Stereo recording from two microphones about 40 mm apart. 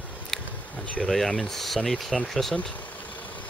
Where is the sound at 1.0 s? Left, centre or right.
Centre.